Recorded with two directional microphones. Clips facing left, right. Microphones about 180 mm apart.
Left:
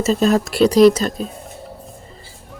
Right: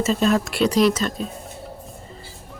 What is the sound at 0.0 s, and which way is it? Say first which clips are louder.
Speech: left 3 dB; 40° left (ahead or behind).